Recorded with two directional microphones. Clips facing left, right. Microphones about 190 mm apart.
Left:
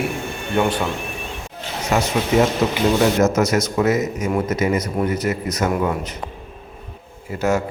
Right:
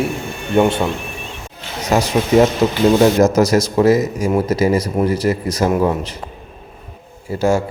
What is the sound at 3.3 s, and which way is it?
Speech, 35° right (ahead or behind).